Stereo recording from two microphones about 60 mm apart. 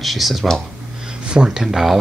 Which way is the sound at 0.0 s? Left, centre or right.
Centre.